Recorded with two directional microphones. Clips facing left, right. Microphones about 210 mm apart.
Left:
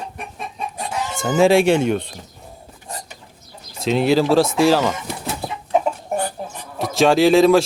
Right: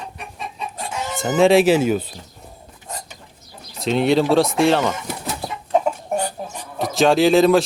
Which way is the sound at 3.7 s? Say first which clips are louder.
Left 1 dB; centre (ahead or behind).